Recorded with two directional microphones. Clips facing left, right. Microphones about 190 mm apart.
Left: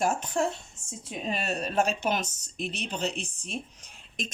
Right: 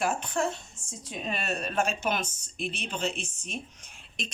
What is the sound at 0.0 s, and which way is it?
Speech, 40° left (ahead or behind).